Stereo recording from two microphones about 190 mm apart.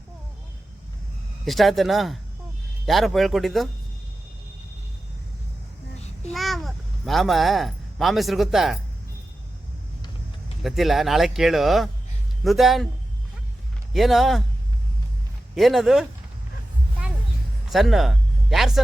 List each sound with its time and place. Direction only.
1.5 s speech: centre (ahead or behind)
6.3 s speech: centre (ahead or behind)
10.6 s speech: centre (ahead or behind)
13.9 s speech: centre (ahead or behind)
15.5 s speech: centre (ahead or behind)
17.7 s speech: centre (ahead or behind)